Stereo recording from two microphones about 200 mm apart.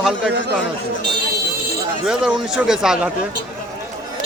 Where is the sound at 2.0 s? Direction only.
5° right (ahead or behind).